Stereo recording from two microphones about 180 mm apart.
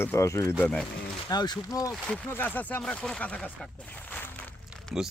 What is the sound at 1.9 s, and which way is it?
Speech, 5° left (ahead or behind).